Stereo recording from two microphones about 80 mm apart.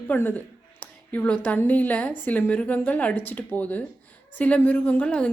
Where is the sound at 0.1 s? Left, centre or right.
Left.